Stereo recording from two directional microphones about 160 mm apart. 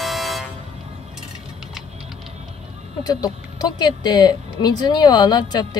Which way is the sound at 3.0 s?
25° left (ahead or behind).